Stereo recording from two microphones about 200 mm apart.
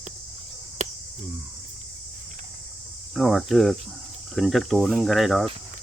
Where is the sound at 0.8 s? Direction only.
35° right (ahead or behind).